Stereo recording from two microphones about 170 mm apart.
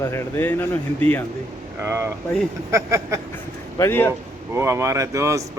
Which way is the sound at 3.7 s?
15° left (ahead or behind).